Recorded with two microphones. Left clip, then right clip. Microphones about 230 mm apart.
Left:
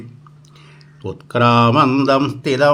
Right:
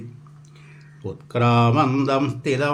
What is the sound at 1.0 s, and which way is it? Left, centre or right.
Speech, left.